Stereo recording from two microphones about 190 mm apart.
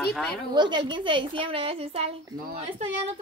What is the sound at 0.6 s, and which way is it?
A woman's voice, 25° right (ahead or behind).